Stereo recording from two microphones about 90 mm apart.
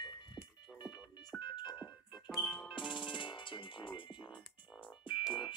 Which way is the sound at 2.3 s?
Centre (ahead or behind).